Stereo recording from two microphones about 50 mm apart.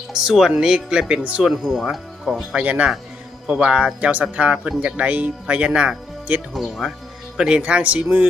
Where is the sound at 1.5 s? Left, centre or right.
Centre.